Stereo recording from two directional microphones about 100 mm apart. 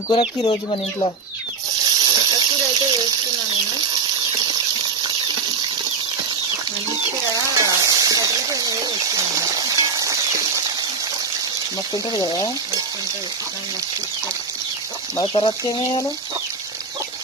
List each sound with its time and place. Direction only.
0.1 s speech: 55° left (ahead or behind)
1.8 s water: 45° right (ahead or behind)
7.6 s a sound: 35° right (ahead or behind)
12.1 s speech: 40° left (ahead or behind)
15.2 s speech: 55° left (ahead or behind)